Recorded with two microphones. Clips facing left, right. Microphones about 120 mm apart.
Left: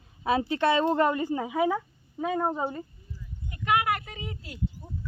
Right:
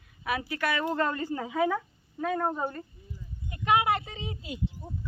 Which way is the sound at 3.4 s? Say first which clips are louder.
Right 1 dB; 25° right (ahead or behind).